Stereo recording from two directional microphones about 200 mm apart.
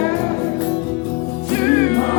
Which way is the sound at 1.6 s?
10° left (ahead or behind).